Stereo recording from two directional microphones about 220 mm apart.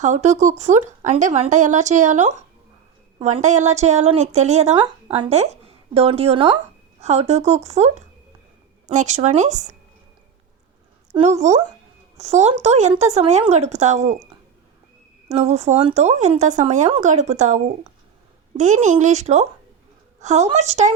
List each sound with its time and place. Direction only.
0.0 s a woman's voice: 30° right (ahead or behind)
8.9 s speech: 30° right (ahead or behind)
11.2 s speech: 30° right (ahead or behind)
15.3 s speech: 30° right (ahead or behind)